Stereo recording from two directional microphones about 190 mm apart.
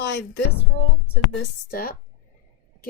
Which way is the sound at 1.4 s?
55° left (ahead or behind).